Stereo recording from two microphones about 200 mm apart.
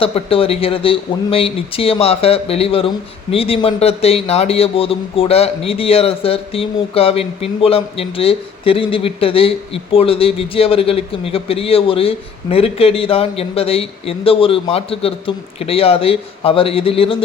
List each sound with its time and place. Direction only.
0.0 s speech: 30° left (ahead or behind)